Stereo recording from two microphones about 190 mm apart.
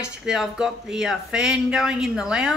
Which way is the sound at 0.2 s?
Centre (ahead or behind).